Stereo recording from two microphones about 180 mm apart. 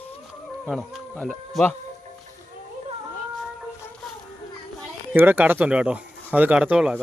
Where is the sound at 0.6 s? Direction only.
Centre (ahead or behind).